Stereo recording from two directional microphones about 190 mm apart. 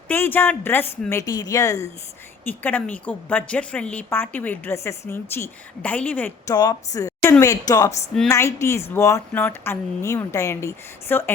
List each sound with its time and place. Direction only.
0.1 s a woman's voice: 10° left (ahead or behind)
6.5 s a woman's voice: 20° left (ahead or behind)